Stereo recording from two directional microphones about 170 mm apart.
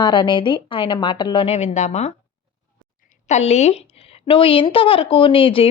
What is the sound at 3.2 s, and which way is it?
Speech, 40° left (ahead or behind).